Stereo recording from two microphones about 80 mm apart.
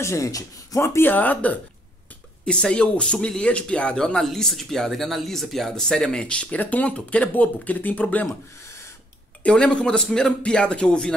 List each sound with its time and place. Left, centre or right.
0.0 s speech: left
0.8 s speech: left
9.4 s speech: centre